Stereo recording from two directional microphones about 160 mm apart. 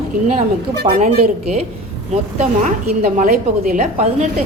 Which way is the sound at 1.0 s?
50° right (ahead or behind).